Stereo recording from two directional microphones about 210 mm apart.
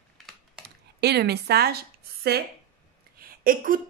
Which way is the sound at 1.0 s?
50° right (ahead or behind).